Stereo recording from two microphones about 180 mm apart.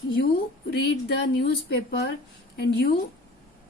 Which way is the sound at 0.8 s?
65° left (ahead or behind).